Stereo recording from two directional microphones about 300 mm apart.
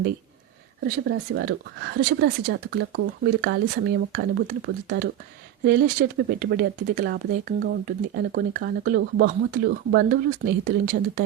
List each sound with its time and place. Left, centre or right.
0.9 s speech: right